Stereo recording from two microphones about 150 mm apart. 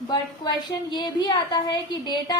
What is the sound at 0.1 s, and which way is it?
A woman's voice, 30° left (ahead or behind).